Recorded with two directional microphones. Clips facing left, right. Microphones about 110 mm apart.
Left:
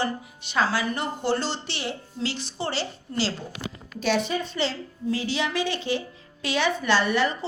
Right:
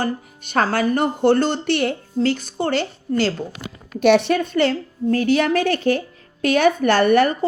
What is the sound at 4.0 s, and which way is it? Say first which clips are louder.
A woman's voice: right 10 dB; 65° right (ahead or behind).